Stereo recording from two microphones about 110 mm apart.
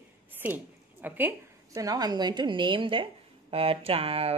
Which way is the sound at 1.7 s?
35° right (ahead or behind).